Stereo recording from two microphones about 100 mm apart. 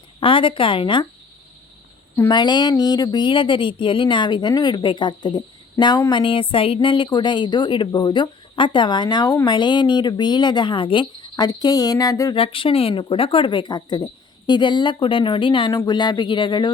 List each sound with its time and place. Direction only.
0.2 s speech: 60° left (ahead or behind)
2.3 s speech: 45° left (ahead or behind)
6.1 s speech: 55° left (ahead or behind); by 12.3 s 35° left (ahead or behind)
12.3 s speech: 65° left (ahead or behind)